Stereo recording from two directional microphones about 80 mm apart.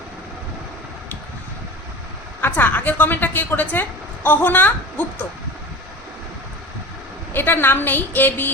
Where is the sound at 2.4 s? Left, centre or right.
Left.